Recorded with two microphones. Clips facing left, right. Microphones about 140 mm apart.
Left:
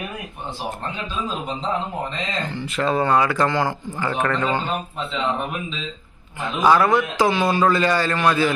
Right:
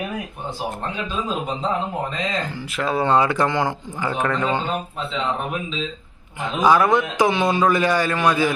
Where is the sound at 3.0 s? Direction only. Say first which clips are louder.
Right 4 dB; 20° right (ahead or behind); by 4.5 s 5° right (ahead or behind).